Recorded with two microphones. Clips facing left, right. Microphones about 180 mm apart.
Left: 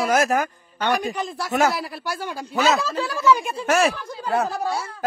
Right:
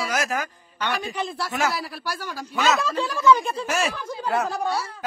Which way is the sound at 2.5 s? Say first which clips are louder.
Left 2 dB; 35° left (ahead or behind).